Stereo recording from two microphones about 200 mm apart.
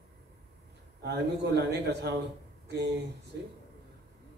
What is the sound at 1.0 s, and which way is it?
A man's voice, 55° right (ahead or behind).